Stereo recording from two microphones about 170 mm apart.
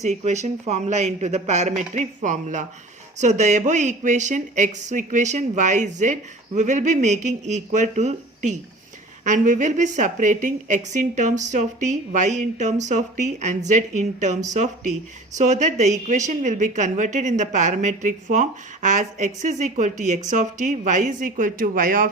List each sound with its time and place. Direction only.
0.0 s a woman's voice: 40° right (ahead or behind)